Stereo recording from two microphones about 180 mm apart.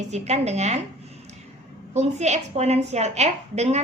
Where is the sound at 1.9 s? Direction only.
40° right (ahead or behind).